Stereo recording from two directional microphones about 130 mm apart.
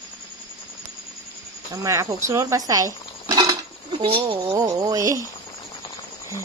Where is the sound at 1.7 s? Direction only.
25° right (ahead or behind).